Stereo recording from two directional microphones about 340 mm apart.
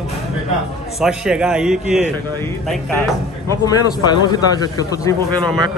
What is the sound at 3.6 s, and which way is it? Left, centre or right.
Speech, centre.